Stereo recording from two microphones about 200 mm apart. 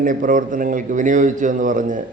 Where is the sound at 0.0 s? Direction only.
40° right (ahead or behind).